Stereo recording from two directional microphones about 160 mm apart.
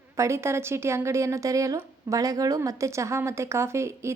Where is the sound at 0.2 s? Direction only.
15° right (ahead or behind).